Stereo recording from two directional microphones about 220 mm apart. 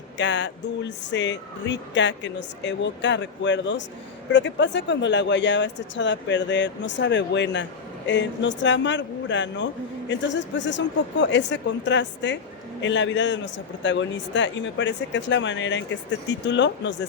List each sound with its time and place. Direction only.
0.2 s speech: 55° left (ahead or behind)